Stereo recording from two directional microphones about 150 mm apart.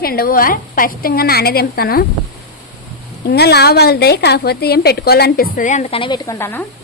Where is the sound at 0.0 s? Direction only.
80° left.